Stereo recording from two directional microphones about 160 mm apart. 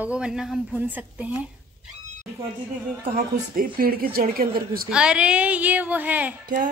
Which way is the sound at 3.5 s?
65° right (ahead or behind).